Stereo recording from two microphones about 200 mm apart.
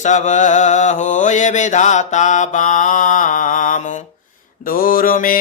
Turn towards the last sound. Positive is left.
turn(degrees=45)  # may be behind; listen again after turning